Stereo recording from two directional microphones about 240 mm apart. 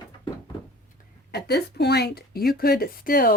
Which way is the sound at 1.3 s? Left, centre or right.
Left.